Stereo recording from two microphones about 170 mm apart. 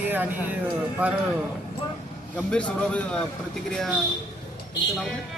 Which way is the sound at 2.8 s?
5° left (ahead or behind).